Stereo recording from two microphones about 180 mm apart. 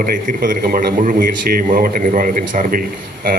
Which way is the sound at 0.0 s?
50° right (ahead or behind).